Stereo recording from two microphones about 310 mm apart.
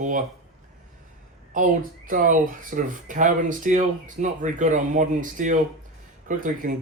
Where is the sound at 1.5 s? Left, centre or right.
Right.